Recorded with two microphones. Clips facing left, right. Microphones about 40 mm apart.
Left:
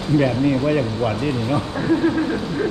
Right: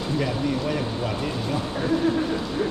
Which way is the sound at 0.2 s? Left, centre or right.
Left.